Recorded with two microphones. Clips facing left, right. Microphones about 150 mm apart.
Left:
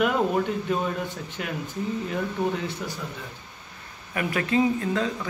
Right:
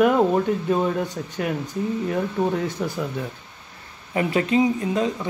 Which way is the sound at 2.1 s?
25° right (ahead or behind).